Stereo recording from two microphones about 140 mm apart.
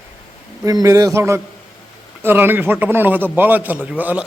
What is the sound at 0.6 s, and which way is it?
A man's voice, 25° right (ahead or behind).